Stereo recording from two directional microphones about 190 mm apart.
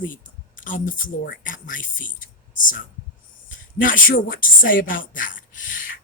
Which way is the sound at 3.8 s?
45° left (ahead or behind).